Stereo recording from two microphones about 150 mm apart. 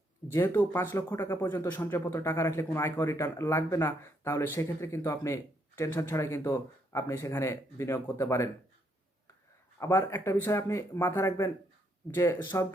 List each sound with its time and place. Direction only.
0.3 s speech: 15° left (ahead or behind)
9.8 s speech: 20° left (ahead or behind)